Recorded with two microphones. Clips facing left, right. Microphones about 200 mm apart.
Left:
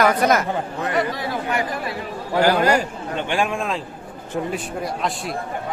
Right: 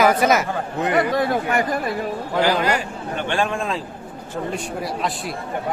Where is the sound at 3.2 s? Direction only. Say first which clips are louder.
Even; 10° left (ahead or behind).